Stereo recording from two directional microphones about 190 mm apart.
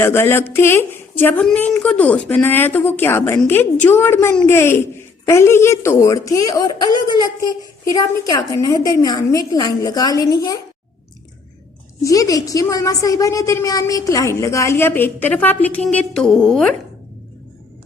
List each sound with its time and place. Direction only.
0.0 s a woman's voice: 10° left (ahead or behind)
12.0 s a woman's voice: 20° left (ahead or behind); by 16.6 s centre (ahead or behind)